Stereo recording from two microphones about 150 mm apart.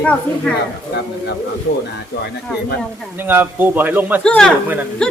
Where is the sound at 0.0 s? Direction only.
10° left (ahead or behind).